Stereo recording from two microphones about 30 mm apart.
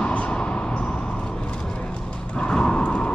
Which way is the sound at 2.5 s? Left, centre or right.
Left.